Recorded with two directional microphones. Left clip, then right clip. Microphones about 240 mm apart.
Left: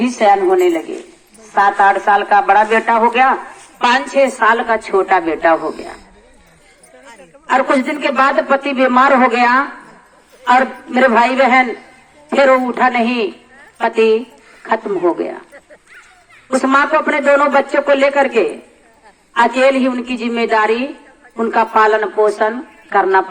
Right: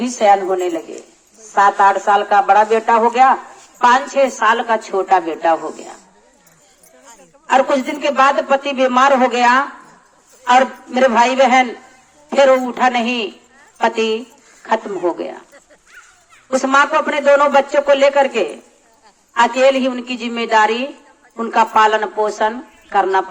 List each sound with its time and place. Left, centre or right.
0.1 s a woman's voice: centre
0.4 s speech: right
1.5 s speech: right; by 6.0 s centre
7.5 s a man's voice: centre
16.5 s a man's voice: centre